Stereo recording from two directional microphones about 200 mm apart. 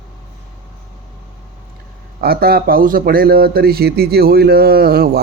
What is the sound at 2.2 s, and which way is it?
Speech, 50° right (ahead or behind).